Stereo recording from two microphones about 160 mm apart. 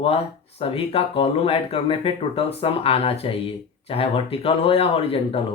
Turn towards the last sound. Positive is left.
turn(degrees=35)  # may be behind; listen again after turning